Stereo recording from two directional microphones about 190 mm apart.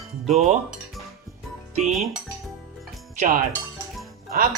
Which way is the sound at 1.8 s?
Centre (ahead or behind).